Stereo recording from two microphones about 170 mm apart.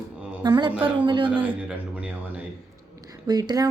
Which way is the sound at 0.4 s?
25° right (ahead or behind).